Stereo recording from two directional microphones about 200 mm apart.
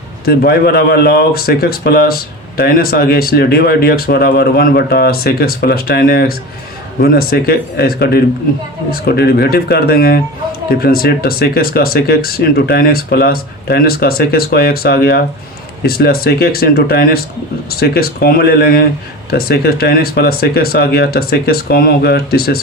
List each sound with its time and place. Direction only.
0.3 s speech: 50° left (ahead or behind)